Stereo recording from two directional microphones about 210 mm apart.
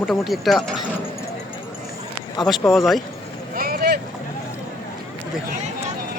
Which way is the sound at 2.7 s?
Centre (ahead or behind).